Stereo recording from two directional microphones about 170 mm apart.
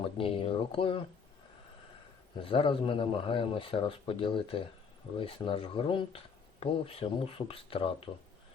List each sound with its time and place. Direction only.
0.2 s speech: 35° left (ahead or behind)
2.3 s speech: 30° left (ahead or behind)